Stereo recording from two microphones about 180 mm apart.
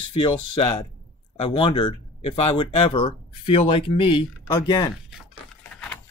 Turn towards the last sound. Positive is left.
turn(degrees=25)  # may be behind; listen again after turning